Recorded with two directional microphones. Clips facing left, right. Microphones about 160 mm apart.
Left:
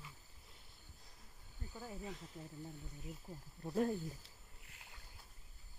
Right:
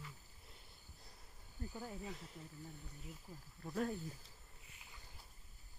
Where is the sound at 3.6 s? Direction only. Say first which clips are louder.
Left 4 dB; 25° left (ahead or behind).